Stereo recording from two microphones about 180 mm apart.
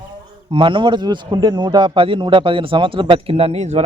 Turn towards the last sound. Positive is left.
turn(degrees=-35)  # may be behind; listen again after turning